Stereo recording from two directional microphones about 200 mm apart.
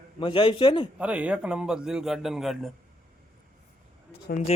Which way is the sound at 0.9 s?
5° right (ahead or behind).